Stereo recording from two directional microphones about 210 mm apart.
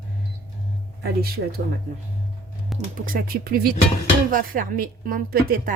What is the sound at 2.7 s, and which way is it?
A woman's voice, 40° right (ahead or behind).